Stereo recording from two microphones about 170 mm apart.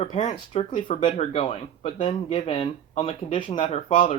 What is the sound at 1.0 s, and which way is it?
Speech, 40° left (ahead or behind).